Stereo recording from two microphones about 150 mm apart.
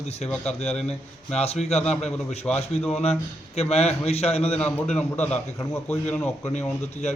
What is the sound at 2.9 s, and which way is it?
A man's voice, 45° left (ahead or behind).